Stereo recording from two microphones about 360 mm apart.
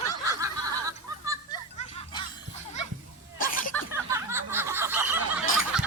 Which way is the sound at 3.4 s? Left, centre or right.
Left.